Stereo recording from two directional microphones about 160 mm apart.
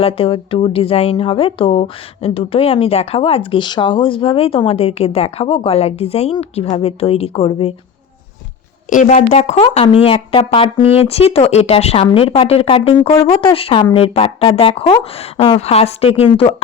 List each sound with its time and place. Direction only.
0.0 s speech: 35° left (ahead or behind)
8.9 s a woman's voice: 50° left (ahead or behind)
9.6 s speech: 35° left (ahead or behind)